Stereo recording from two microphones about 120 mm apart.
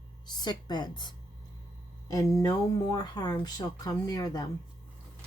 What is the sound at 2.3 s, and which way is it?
Speech, 30° left (ahead or behind).